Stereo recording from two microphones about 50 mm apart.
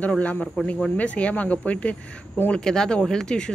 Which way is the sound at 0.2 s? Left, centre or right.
Left.